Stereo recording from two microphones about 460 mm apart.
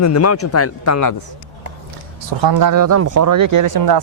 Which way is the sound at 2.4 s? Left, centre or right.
Right.